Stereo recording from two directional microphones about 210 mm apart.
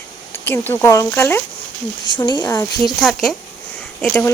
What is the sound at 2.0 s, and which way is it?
Speech, 20° left (ahead or behind).